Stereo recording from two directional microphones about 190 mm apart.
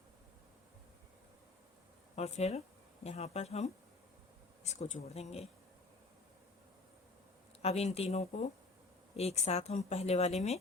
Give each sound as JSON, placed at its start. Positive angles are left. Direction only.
{"t": 2.1, "sound": "a woman's voice", "side_deg": 35}
{"t": 7.6, "sound": "a woman's voice", "side_deg": 35}